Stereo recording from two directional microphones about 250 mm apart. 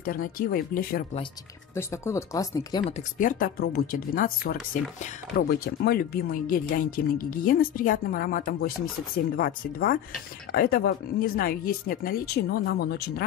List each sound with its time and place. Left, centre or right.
0.0 s speech: left
1.8 s speech: centre
2.8 s speech: left